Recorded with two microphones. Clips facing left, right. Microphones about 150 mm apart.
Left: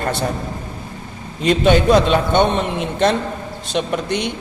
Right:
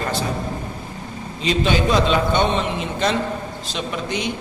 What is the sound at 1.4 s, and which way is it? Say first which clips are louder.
A man's voice: left 6 dB; 55° left (ahead or behind).